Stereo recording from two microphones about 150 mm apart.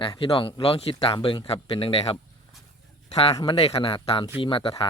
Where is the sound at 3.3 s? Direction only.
35° left (ahead or behind).